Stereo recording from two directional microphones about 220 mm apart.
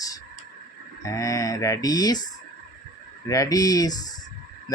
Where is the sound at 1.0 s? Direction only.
15° left (ahead or behind).